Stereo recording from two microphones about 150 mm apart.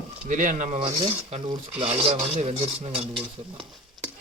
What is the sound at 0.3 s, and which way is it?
Speech, 60° right (ahead or behind).